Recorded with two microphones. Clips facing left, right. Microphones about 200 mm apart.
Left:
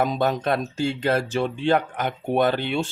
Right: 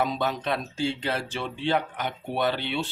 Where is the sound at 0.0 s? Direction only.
45° left (ahead or behind).